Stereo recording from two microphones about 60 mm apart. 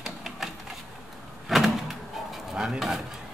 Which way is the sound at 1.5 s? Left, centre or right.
Centre.